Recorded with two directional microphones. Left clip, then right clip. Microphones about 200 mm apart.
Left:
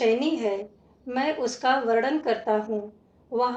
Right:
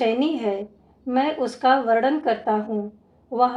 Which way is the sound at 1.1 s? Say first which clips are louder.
Right 4 dB; 45° right (ahead or behind).